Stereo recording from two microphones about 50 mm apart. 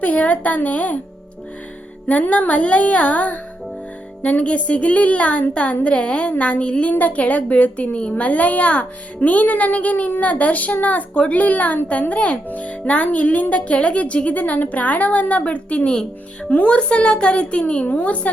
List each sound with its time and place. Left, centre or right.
0.0 s a woman's voice: left
2.0 s a child's voice: left